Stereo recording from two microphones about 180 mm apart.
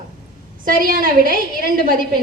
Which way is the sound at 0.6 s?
50° right (ahead or behind).